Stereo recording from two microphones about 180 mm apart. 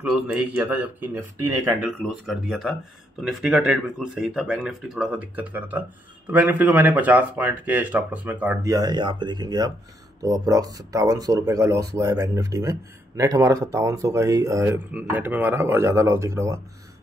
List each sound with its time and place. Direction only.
0.0 s speech: 5° right (ahead or behind)
1.9 s speech: centre (ahead or behind)
8.7 s speech: 25° right (ahead or behind)